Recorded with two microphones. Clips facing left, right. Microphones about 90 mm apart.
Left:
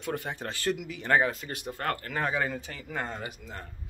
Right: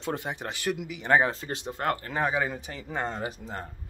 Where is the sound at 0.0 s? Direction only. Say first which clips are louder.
Right 1 dB; 20° right (ahead or behind).